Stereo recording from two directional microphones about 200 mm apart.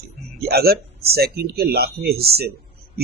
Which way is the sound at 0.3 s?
50° right (ahead or behind).